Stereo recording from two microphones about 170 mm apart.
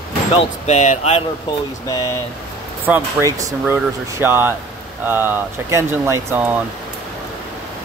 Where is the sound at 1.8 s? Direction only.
20° left (ahead or behind).